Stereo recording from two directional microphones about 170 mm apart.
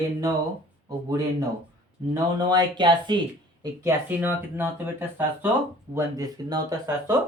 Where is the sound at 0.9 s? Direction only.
20° right (ahead or behind).